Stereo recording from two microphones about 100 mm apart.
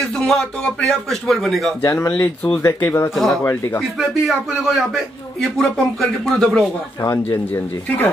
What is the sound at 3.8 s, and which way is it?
A man's voice, centre (ahead or behind).